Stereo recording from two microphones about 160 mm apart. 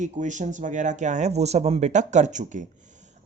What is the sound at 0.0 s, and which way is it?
Speech, 50° right (ahead or behind).